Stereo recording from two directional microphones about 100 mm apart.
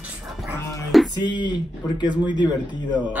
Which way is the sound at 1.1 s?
50° left (ahead or behind).